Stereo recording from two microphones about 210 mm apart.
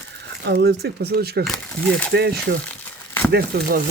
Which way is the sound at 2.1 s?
50° right (ahead or behind).